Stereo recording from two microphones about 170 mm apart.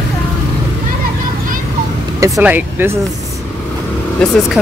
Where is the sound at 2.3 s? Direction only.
10° right (ahead or behind).